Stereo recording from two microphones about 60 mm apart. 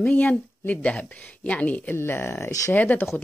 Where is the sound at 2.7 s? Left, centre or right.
Left.